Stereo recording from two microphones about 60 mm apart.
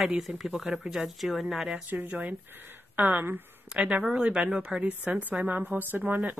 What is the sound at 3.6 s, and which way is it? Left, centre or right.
Speech, centre.